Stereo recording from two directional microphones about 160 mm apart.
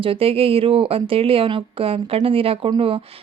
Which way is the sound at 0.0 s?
35° right (ahead or behind).